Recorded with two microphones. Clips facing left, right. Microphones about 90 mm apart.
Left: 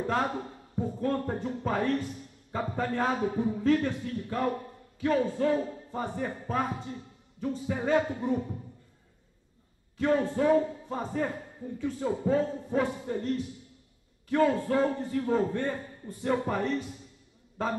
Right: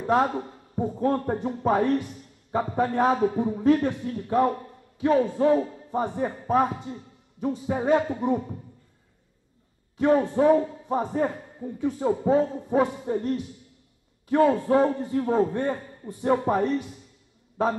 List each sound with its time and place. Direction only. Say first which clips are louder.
0.0 s a man's voice: right 6 dB; 20° right (ahead or behind)
9.9 s a man's voice: right 5 dB; 20° right (ahead or behind)